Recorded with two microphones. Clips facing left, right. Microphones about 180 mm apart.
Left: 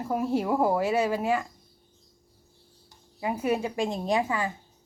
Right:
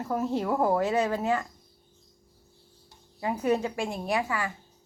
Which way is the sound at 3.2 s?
10° left (ahead or behind).